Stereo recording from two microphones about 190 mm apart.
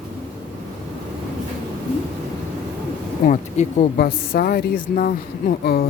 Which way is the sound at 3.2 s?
40° left (ahead or behind).